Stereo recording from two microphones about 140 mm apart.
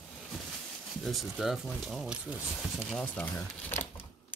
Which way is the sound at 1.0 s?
Centre (ahead or behind).